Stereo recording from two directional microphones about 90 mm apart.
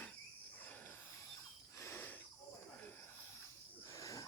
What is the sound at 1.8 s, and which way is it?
Wheeze, 30° left (ahead or behind).